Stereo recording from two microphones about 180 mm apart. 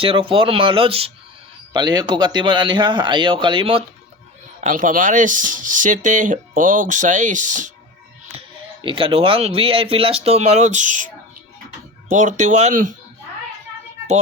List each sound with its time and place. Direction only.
0.0 s a man's voice: 30° right (ahead or behind)
4.6 s speech: 45° right (ahead or behind)
8.4 s speech: 30° right (ahead or behind); by 12.9 s 45° right (ahead or behind)